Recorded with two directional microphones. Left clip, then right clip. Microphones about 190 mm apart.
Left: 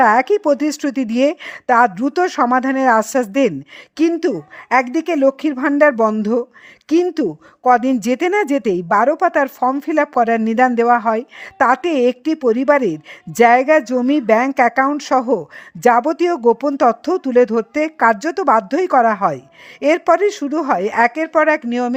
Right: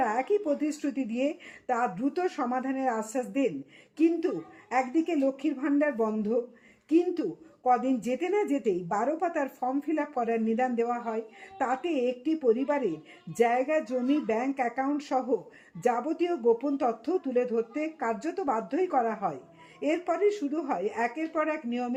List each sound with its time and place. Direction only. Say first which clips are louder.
0.0 s speech: left 15 dB; 45° left (ahead or behind)